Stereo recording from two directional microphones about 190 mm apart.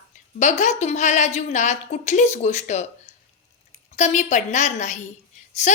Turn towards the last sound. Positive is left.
turn(degrees=35)  # may be behind; listen again after turning